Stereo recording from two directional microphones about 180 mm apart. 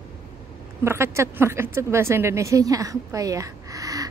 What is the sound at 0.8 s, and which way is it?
Speech, 15° right (ahead or behind).